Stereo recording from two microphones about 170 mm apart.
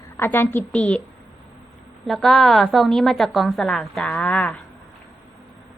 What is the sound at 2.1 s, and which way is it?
A woman's voice, centre (ahead or behind).